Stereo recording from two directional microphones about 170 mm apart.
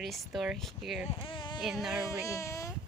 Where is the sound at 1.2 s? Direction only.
30° left (ahead or behind).